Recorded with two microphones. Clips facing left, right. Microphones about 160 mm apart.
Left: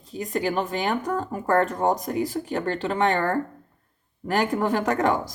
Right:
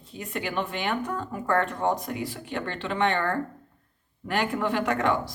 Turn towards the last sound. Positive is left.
turn(degrees=40)  # may be behind; listen again after turning